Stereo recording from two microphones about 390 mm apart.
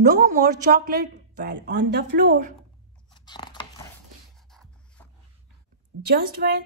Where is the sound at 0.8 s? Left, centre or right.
Right.